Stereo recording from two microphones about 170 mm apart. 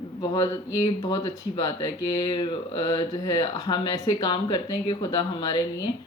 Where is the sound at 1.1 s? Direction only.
20° left (ahead or behind).